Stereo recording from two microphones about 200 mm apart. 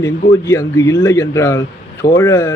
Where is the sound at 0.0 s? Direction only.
15° left (ahead or behind).